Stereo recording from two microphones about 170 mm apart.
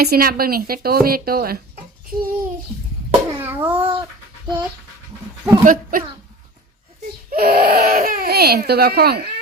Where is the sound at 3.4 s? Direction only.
10° right (ahead or behind).